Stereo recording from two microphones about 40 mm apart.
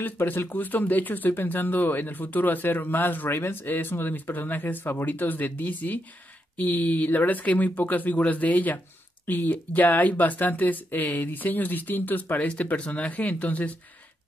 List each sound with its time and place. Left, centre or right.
0.0 s speech: left
12.4 s speech: left